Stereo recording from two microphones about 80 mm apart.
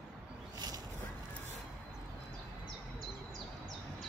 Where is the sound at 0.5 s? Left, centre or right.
Right.